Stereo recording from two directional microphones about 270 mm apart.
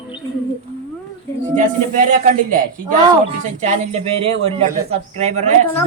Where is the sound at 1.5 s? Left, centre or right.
Right.